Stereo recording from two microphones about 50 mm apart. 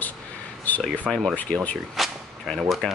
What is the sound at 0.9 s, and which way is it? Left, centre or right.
Speech, left.